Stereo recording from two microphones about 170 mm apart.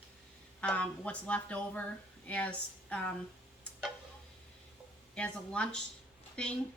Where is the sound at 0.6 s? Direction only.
5° left (ahead or behind).